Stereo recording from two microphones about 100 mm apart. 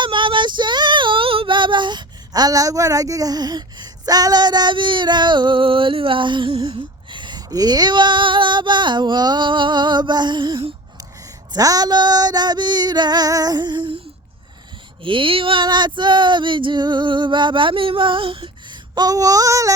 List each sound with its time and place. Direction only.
0.0 s female singing: 55° right (ahead or behind)
11.5 s female singing: 40° right (ahead or behind); by 14.0 s 55° right (ahead or behind)
15.0 s speech: 60° right (ahead or behind)
15.6 s female singing: 50° right (ahead or behind); by 19.7 s 35° right (ahead or behind)